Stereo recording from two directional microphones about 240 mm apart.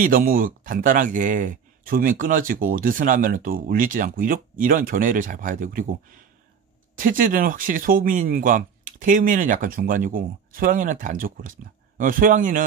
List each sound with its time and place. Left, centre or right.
0.0 s speech: right